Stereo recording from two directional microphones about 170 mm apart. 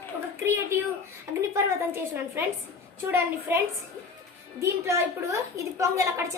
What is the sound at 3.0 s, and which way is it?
A woman's voice, 15° right (ahead or behind).